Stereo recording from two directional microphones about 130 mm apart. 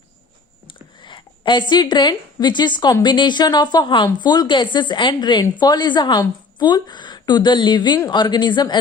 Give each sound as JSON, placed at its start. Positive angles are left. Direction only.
{"t": 0.9, "sound": "a woman's voice", "side_deg": 35}